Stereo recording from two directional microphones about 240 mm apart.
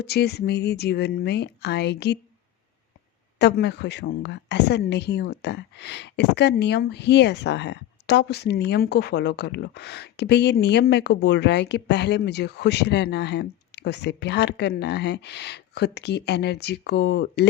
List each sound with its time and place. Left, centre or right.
0.0 s a woman's voice: left
3.3 s a woman's voice: left